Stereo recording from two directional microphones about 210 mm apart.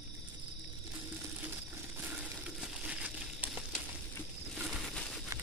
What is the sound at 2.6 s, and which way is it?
Crumpling, 5° right (ahead or behind).